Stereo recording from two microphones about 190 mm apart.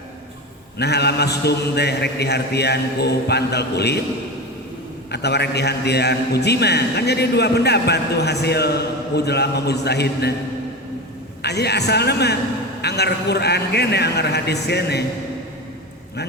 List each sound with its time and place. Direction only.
0.8 s a man's voice: 60° left (ahead or behind)
5.1 s a man's voice: 60° left (ahead or behind)
11.4 s a man's voice: 60° left (ahead or behind)